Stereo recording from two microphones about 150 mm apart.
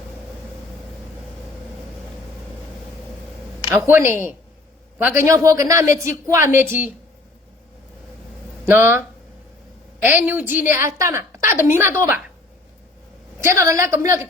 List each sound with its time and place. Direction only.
3.8 s a woman's voice: 15° right (ahead or behind)
8.6 s a woman's voice: 15° right (ahead or behind)
13.4 s speech: 20° right (ahead or behind)